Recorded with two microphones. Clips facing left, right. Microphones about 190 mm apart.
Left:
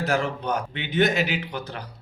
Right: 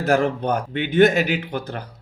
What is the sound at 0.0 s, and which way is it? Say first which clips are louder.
Speech: right 6 dB; 50° right (ahead or behind).